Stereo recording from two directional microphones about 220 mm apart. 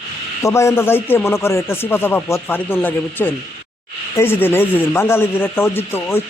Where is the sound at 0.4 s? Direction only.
15° left (ahead or behind).